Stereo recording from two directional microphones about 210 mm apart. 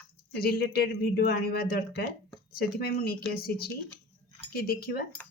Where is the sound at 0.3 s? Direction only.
45° left (ahead or behind).